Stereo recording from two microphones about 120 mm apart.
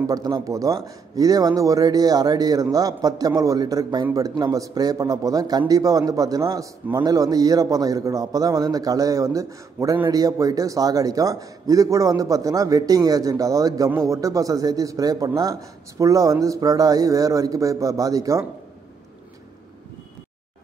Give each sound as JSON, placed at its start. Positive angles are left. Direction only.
{"t": 0.0, "sound": "a man's voice", "side_deg": -30}